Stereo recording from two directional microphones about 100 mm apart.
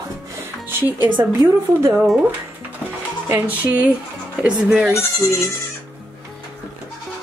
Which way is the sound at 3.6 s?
15° right (ahead or behind).